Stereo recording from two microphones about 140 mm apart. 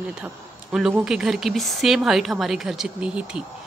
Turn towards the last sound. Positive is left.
turn(degrees=-5)  # may be behind; listen again after turning